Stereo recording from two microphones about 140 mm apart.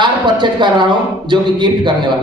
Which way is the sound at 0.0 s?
35° right (ahead or behind).